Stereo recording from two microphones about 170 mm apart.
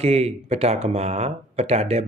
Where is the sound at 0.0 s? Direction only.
40° right (ahead or behind).